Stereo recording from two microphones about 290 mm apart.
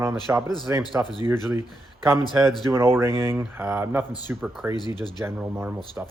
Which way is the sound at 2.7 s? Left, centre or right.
Centre.